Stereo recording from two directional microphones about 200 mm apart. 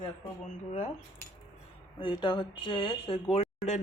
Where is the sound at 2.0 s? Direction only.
25° left (ahead or behind).